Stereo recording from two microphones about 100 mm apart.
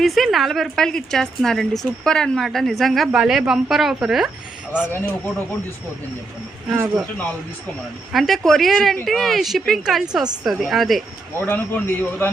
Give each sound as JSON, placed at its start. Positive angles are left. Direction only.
{"t": 0.0, "sound": "speech", "side_deg": 0}
{"t": 4.9, "sound": "a man's voice", "side_deg": 20}
{"t": 8.1, "sound": "speech", "side_deg": 0}
{"t": 11.3, "sound": "a man's voice", "side_deg": 20}